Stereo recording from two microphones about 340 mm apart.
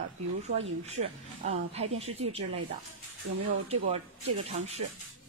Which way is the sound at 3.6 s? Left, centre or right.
Centre.